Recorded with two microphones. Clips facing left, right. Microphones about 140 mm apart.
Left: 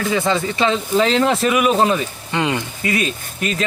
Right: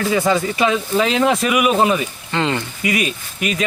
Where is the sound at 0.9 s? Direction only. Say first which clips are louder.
Left 2 dB; 10° right (ahead or behind).